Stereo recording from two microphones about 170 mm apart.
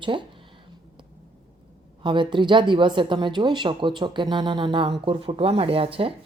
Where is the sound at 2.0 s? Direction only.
30° right (ahead or behind).